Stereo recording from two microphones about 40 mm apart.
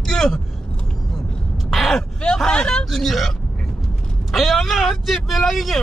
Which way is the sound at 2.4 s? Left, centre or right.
Left.